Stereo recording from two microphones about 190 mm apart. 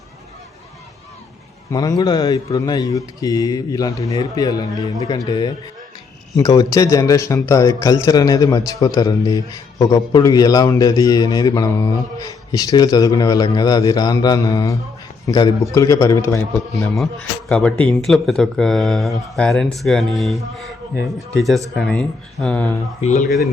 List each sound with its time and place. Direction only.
1.7 s a man's voice: 20° left (ahead or behind)
23.0 s speech: 35° left (ahead or behind)